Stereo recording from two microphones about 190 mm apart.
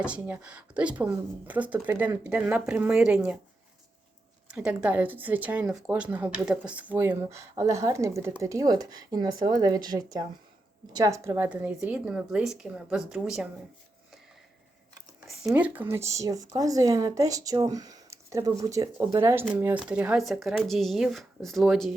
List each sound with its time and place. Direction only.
0.0 s speech: 5° right (ahead or behind)
4.5 s speech: 5° right (ahead or behind)
15.3 s speech: 5° right (ahead or behind)